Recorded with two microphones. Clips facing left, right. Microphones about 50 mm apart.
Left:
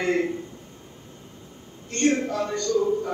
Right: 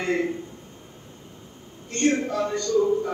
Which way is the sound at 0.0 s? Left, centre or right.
Right.